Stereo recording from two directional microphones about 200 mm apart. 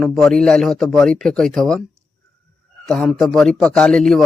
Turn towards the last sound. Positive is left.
turn(degrees=0)  # may be behind; listen again after turning